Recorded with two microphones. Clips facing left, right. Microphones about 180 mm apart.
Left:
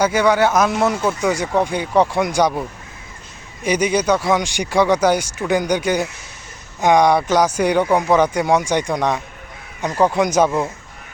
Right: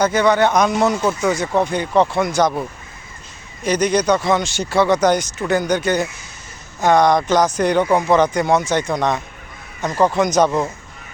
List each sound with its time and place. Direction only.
0.0 s speech: 10° left (ahead or behind)
3.6 s speech: 10° left (ahead or behind)